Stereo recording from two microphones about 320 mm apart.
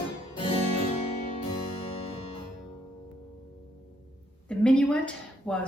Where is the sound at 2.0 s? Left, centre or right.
Centre.